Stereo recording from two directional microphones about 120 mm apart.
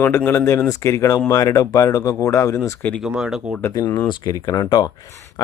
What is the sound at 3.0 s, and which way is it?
Speech, 5° right (ahead or behind).